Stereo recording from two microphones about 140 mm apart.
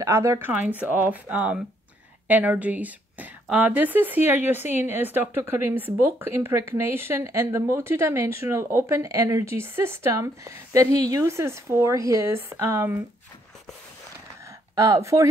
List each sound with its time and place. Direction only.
0.0 s speech: 20° right (ahead or behind)
14.8 s speech: 20° right (ahead or behind)